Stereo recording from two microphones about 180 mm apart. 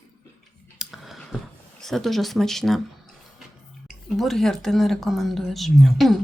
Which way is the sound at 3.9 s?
Centre (ahead or behind).